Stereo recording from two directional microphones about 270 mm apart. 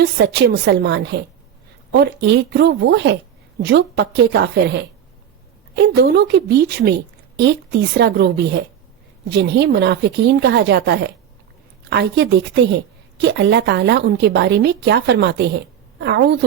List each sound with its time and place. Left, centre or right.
0.0 s a woman's voice: right